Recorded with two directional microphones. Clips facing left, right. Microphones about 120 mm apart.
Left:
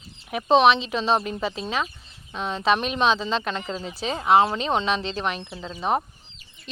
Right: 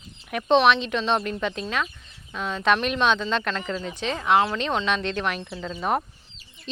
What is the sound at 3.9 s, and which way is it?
Speech, 35° left (ahead or behind).